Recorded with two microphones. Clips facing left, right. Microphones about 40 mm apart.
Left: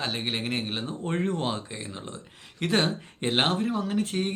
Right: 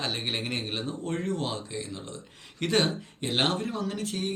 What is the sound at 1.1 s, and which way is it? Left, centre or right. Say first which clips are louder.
Speech: left 4 dB; left.